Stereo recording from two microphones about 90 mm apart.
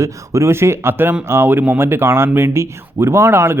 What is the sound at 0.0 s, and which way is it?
Speech, 35° right (ahead or behind).